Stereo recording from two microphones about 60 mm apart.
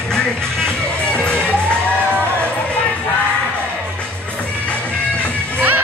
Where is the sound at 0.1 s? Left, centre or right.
Centre.